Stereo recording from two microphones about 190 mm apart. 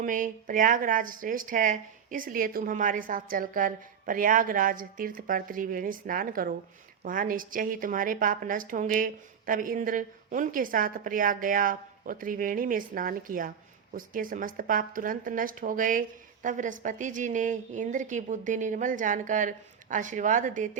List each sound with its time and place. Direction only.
0.0 s speech: 45° right (ahead or behind)